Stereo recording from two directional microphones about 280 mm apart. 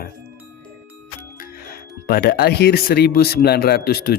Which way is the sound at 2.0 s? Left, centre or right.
Left.